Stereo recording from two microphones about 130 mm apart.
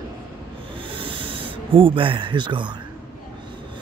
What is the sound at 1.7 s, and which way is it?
Speech, 45° right (ahead or behind).